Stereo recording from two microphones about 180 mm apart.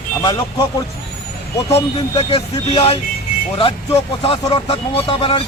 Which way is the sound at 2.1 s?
30° left (ahead or behind).